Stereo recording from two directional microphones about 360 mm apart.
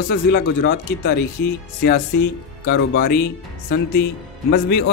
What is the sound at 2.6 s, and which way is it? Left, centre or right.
Speech, left.